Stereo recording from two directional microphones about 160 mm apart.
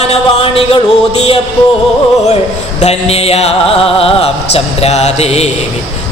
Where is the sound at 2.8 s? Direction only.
40° left (ahead or behind).